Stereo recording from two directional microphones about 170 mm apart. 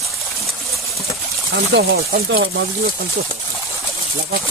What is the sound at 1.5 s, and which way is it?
Speech, 90° right.